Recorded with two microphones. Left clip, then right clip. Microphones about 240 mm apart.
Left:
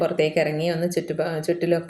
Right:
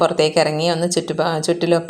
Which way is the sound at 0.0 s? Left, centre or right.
Right.